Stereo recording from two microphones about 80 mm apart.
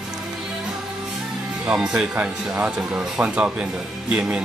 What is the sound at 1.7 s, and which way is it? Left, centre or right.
Speech, centre.